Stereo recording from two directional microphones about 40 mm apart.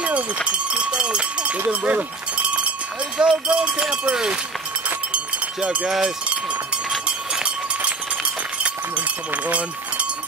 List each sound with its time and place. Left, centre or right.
0.5 s cowbell: right
1.7 s a sound: right
3.2 s speech: right
4.8 s run: right
5.9 s speech: centre
8.9 s speech: right